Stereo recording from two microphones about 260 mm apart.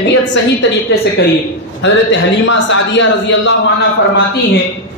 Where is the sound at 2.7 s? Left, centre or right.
Left.